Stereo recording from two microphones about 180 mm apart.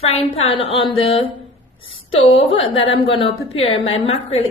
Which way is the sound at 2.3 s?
30° left (ahead or behind).